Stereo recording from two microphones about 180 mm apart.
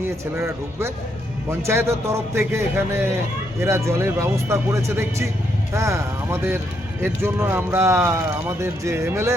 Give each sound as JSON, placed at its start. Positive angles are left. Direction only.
{"t": 0.0, "sound": "speech", "side_deg": -15}